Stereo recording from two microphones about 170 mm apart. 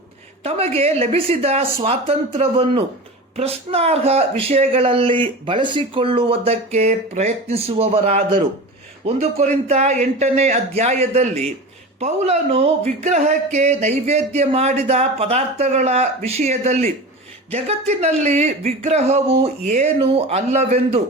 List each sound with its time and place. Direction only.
0.4 s speech: 35° right (ahead or behind)